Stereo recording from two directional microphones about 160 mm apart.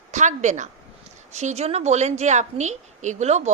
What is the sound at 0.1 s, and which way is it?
A woman's voice, 50° right (ahead or behind).